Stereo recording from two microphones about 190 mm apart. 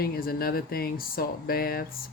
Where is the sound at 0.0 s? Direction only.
50° left (ahead or behind).